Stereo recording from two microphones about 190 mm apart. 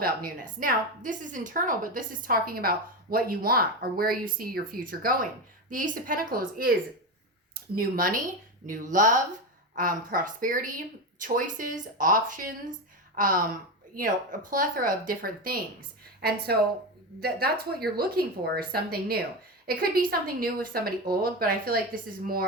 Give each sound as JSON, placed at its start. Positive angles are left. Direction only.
{"t": 0.0, "sound": "a woman's voice", "side_deg": -50}
{"t": 7.8, "sound": "a woman's voice", "side_deg": -45}